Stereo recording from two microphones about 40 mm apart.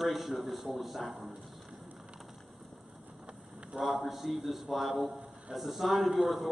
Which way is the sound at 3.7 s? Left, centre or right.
Centre.